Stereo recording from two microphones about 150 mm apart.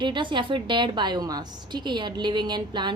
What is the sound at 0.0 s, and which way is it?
A woman's voice, 30° right (ahead or behind).